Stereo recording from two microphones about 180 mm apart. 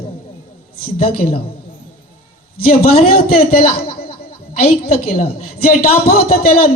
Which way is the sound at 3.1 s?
55° left (ahead or behind).